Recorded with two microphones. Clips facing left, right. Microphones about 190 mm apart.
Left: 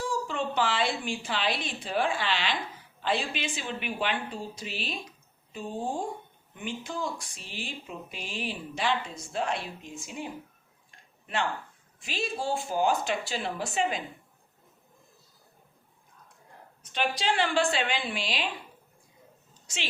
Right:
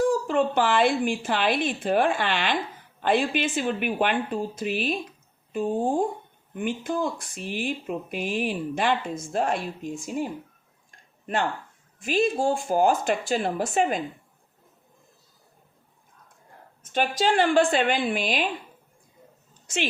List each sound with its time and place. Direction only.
0.0 s a woman's voice: 55° right (ahead or behind)
11.9 s speech: 50° right (ahead or behind)
16.8 s speech: 45° right (ahead or behind)